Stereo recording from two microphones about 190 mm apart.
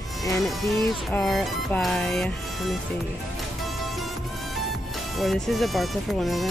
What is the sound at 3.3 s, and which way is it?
Music, centre (ahead or behind).